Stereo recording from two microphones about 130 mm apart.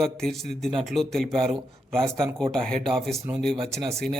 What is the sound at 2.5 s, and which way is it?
A man's voice, 5° left (ahead or behind).